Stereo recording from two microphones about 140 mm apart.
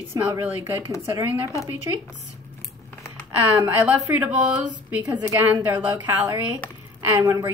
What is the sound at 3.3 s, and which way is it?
A woman's voice, 15° right (ahead or behind).